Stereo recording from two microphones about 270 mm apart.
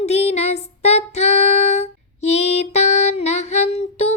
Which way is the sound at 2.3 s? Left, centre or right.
Left.